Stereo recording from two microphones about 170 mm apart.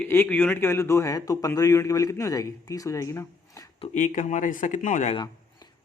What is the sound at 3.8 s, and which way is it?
Speech, 45° left (ahead or behind).